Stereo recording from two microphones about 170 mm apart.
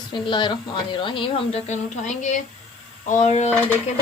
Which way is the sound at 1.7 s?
45° left (ahead or behind).